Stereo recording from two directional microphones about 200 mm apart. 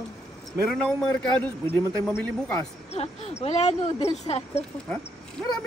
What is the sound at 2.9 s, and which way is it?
Speech, 30° left (ahead or behind).